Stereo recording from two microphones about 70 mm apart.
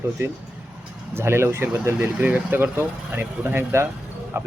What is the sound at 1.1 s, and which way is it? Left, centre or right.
Speech, right.